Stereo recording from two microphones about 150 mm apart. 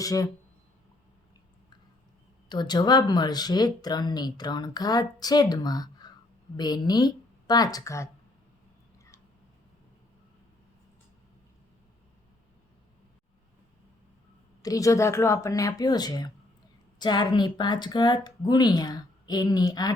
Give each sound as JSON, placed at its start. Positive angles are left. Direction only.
{"t": 0.0, "sound": "speech", "side_deg": 25}
{"t": 2.5, "sound": "speech", "side_deg": 30}
{"t": 14.6, "sound": "speech", "side_deg": 25}